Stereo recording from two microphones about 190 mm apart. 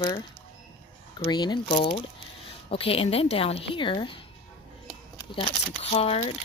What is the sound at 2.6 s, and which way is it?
Speech, 30° left (ahead or behind).